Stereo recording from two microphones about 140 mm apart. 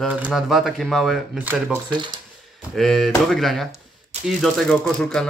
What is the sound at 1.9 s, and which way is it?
Speech, 30° right (ahead or behind).